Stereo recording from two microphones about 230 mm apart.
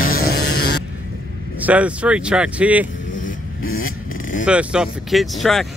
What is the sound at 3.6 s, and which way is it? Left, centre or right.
Vehicle, left.